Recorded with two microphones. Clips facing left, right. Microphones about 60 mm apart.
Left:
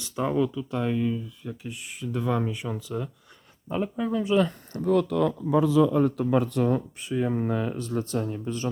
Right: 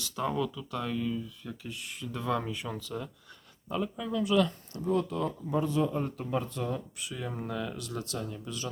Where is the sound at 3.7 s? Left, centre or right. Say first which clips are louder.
Left 5 dB; left.